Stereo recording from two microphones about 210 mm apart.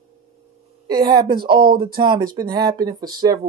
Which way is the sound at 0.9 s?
20° right (ahead or behind).